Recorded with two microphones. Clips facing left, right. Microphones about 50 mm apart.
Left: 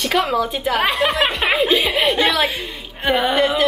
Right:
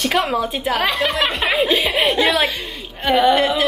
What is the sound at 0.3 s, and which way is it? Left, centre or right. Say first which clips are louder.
Speech: left 1 dB; centre.